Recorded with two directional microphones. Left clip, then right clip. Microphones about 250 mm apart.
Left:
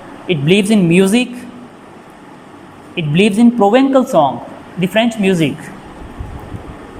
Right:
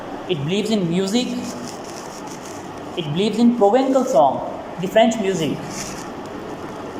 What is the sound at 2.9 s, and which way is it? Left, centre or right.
Speech, left.